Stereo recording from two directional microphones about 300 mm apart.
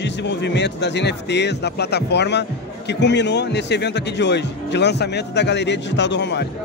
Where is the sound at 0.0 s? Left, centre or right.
Left.